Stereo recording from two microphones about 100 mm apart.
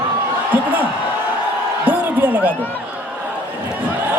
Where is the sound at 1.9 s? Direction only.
15° right (ahead or behind).